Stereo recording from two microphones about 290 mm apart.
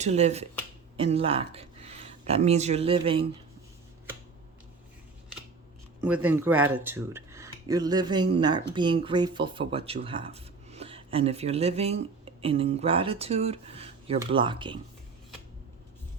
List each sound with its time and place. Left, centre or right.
0.0 s speech: right
6.1 s speech: centre